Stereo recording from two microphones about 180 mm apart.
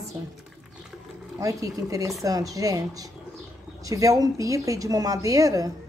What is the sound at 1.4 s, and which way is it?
A woman's voice, 20° right (ahead or behind).